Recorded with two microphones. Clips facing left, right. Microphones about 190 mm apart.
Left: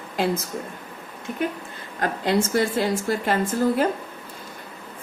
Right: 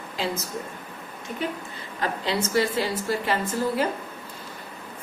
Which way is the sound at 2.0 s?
50° left (ahead or behind).